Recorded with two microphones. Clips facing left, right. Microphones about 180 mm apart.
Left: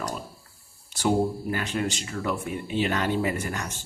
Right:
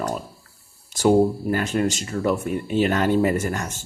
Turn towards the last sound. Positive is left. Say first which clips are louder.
# right 6 dB
turn(degrees=-45)  # may be behind; listen again after turning